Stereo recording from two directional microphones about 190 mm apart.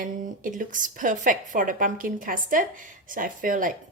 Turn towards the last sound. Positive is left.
turn(degrees=-45)  # may be behind; listen again after turning